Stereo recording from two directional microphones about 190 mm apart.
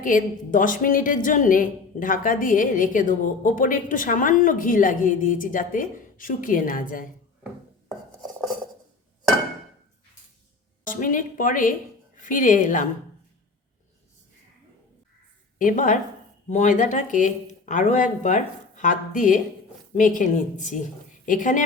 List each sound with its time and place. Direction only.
0.0 s a woman's voice: 45° left (ahead or behind)
7.4 s dishes: centre (ahead or behind)
10.8 s a woman's voice: 45° left (ahead or behind)
15.5 s a woman's voice: 45° left (ahead or behind)